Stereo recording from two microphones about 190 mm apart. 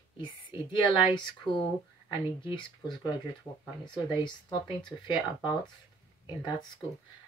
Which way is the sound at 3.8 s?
25° left (ahead or behind).